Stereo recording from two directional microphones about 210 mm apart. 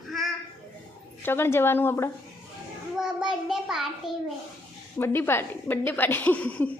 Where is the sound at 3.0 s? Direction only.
5° right (ahead or behind).